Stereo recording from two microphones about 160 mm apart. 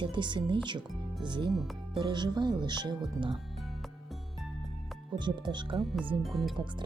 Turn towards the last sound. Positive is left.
turn(degrees=0)  # may be behind; listen again after turning